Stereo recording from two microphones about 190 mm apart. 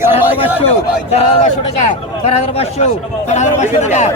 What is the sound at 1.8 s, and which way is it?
Speech, 35° left (ahead or behind).